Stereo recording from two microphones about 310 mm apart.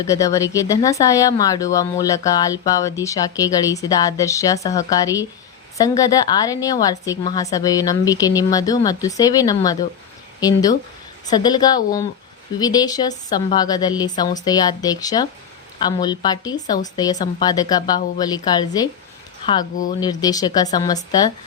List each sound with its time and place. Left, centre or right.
0.0 s speech: centre